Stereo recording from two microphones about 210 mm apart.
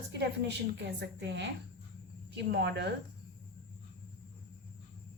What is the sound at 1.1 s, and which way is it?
A woman's voice, 55° right (ahead or behind).